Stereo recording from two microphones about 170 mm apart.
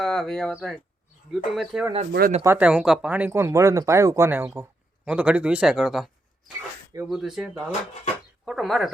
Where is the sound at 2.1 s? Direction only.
60° right (ahead or behind).